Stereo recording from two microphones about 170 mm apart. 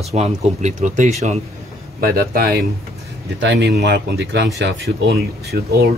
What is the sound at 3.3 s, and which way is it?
Speech, 90° right.